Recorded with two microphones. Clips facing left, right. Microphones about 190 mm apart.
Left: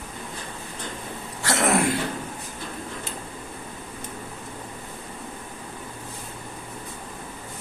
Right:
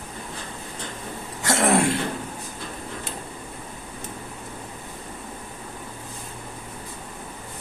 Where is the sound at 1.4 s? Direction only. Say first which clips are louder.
Right 2 dB; 25° right (ahead or behind).